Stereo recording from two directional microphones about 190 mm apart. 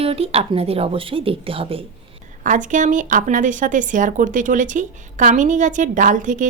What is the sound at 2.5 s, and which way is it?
Speech, 40° right (ahead or behind).